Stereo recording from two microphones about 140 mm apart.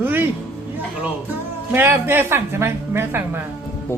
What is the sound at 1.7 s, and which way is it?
A woman's voice, 15° right (ahead or behind).